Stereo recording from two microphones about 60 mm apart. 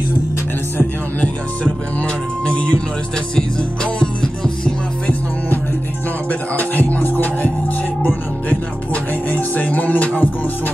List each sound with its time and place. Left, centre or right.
2.4 s music: left
6.5 s music: left